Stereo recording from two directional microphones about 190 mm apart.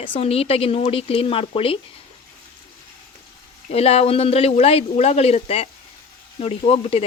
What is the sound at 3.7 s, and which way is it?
Speech, 30° left (ahead or behind).